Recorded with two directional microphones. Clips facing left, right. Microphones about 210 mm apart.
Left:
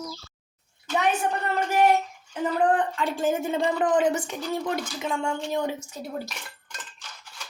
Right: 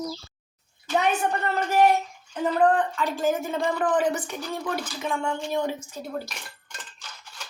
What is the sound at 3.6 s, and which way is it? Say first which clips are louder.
Speech: left 1 dB; 20° left (ahead or behind).